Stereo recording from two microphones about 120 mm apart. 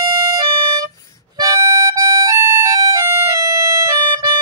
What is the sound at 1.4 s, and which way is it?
Music, 30° right (ahead or behind).